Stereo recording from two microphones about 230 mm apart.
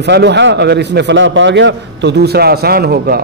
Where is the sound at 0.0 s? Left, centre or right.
Right.